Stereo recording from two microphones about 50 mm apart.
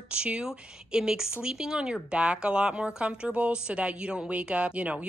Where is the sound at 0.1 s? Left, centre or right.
Right.